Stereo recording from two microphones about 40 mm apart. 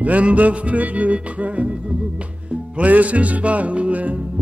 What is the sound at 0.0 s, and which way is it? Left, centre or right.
Music, right.